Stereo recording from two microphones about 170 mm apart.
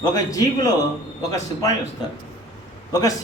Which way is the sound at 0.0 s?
20° left (ahead or behind).